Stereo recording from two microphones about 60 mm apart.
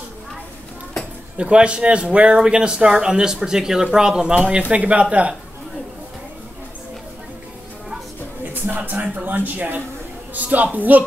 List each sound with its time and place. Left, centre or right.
1.3 s a woman's voice: centre
8.6 s a woman's voice: right